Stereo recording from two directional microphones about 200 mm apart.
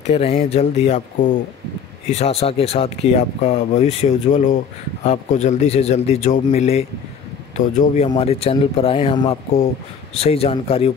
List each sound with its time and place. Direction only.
0.0 s speech: 30° left (ahead or behind)